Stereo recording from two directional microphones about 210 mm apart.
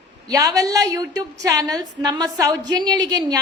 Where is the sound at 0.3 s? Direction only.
15° right (ahead or behind).